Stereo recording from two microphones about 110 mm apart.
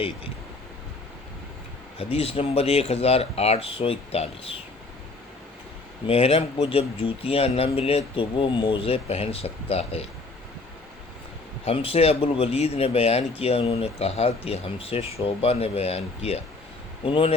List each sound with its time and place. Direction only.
2.0 s speech: 65° left (ahead or behind)
6.1 s speech: 65° left (ahead or behind)
11.6 s speech: 60° left (ahead or behind)
17.0 s speech: 55° left (ahead or behind)